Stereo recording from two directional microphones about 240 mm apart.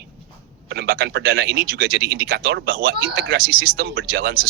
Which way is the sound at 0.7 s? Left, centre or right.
Right.